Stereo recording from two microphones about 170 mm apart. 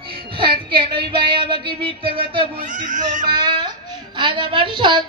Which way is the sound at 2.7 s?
45° right (ahead or behind).